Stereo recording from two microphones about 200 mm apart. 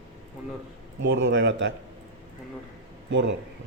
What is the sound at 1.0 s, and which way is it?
Speech, 75° right (ahead or behind).